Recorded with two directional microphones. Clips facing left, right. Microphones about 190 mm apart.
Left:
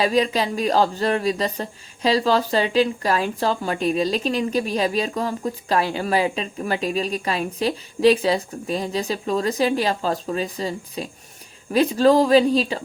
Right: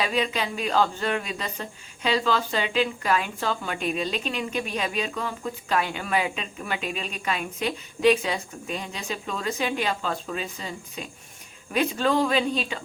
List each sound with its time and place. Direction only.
0.0 s speech: 35° left (ahead or behind)